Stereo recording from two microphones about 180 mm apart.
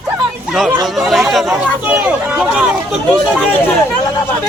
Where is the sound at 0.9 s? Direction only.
Centre (ahead or behind).